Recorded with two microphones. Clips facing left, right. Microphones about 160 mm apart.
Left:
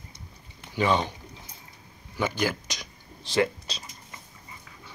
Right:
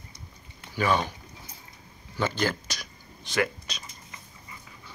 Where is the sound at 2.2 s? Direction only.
10° left (ahead or behind).